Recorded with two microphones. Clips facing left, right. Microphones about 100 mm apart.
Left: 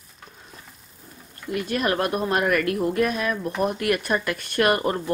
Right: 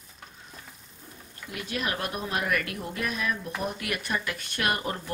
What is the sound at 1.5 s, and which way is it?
Speech, 50° left (ahead or behind).